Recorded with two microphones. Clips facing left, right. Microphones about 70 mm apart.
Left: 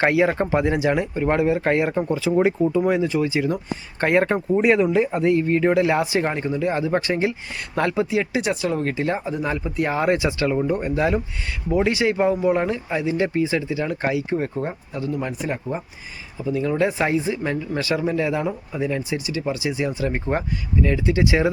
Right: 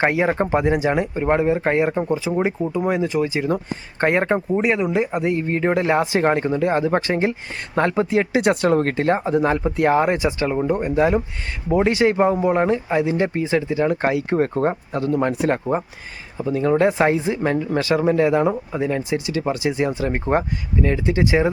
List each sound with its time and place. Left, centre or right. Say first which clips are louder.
0.1 s speech: even; right
2.3 s speech: left 3 dB; centre
2.7 s speech: even; right
4.6 s speech: left 3 dB; centre
4.9 s speech: left 2 dB; right
10.1 s speech: even; right
11.7 s speech: right 3 dB; right
13.0 s speech: right 1 dB; right
16.4 s speech: right 4 dB; right
20.1 s speech: right 4 dB; right